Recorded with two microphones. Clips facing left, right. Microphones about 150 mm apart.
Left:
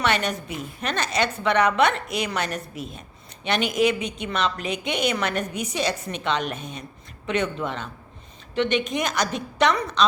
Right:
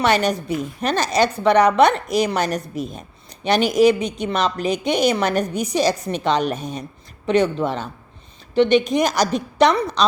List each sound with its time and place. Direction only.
0.0 s a woman's voice: 35° right (ahead or behind)